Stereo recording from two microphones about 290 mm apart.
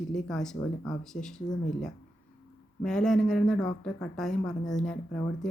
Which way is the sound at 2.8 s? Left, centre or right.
Centre.